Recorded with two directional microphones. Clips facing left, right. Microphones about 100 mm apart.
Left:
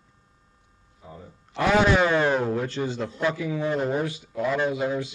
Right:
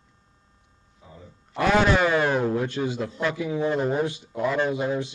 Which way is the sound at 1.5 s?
Centre (ahead or behind).